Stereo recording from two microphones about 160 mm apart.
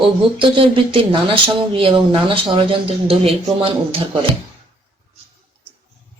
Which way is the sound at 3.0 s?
35° right (ahead or behind).